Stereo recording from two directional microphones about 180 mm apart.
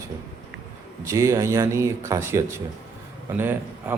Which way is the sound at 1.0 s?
15° right (ahead or behind).